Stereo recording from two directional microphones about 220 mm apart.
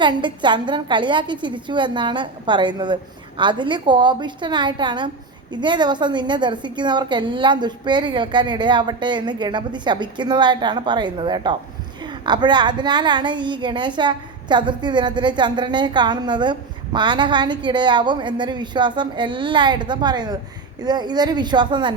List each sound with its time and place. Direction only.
0.0 s a woman's voice: 20° right (ahead or behind)